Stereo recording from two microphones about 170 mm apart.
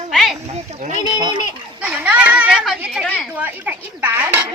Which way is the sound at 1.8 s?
5° right (ahead or behind).